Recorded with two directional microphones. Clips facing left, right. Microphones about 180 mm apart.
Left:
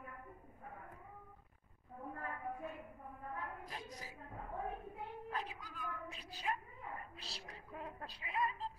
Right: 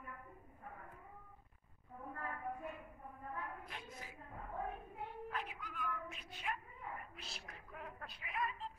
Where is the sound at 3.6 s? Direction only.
40° left (ahead or behind).